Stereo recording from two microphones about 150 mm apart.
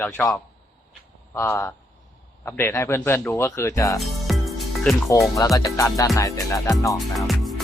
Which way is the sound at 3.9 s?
Centre (ahead or behind).